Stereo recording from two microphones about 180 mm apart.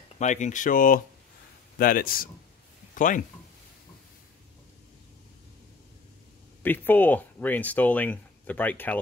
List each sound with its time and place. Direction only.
0.2 s speech: 40° left (ahead or behind)
2.9 s a sound: 45° left (ahead or behind)
6.6 s speech: 10° left (ahead or behind)